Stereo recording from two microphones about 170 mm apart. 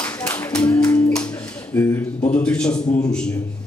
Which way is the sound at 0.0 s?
10° left (ahead or behind).